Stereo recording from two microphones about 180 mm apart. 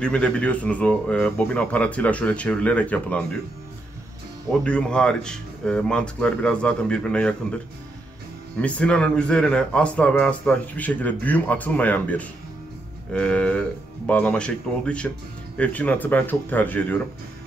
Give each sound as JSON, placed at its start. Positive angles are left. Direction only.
{"t": 0.0, "sound": "a man's voice", "side_deg": 5}
{"t": 4.5, "sound": "a man's voice", "side_deg": 5}